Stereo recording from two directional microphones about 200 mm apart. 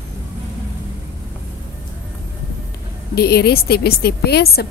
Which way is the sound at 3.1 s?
50° left (ahead or behind).